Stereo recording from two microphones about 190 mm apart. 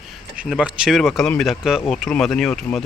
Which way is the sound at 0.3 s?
5° right (ahead or behind).